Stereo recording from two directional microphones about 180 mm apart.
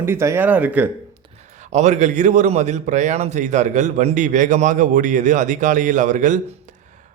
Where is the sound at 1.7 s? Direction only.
40° right (ahead or behind).